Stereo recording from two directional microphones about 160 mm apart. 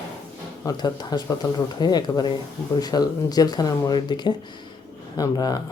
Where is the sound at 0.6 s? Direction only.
25° left (ahead or behind).